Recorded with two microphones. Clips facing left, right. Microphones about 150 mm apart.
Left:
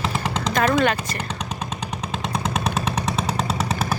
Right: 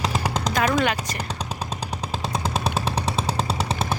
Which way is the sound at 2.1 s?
35° right (ahead or behind).